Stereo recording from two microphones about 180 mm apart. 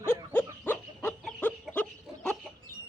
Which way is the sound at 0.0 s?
10° left (ahead or behind).